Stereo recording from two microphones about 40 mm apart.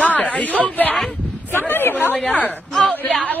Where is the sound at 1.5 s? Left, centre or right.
Left.